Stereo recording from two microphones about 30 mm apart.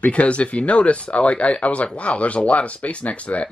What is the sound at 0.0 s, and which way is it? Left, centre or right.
Speech, left.